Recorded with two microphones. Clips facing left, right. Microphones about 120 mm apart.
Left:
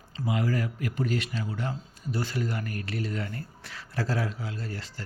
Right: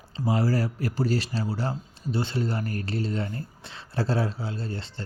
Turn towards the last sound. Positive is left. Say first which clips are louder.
# right 3 dB
turn(degrees=-25)  # may be behind; listen again after turning